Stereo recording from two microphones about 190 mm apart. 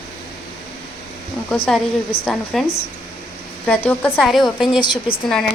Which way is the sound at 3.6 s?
10° left (ahead or behind).